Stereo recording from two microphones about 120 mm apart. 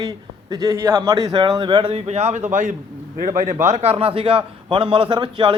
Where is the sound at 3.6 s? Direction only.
60° right (ahead or behind); by 5.5 s 45° right (ahead or behind).